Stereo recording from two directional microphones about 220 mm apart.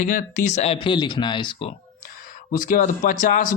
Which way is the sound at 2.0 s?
35° left (ahead or behind).